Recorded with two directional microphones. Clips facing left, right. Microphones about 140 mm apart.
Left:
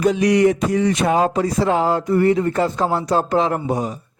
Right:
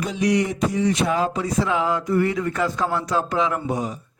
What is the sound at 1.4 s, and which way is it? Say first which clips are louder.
Speech: left 4 dB; 35° left (ahead or behind).